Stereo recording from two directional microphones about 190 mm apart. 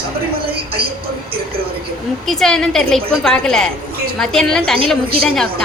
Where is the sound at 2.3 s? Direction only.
Centre (ahead or behind).